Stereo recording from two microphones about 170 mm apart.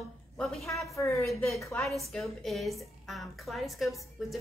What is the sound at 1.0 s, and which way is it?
Speech, 20° left (ahead or behind).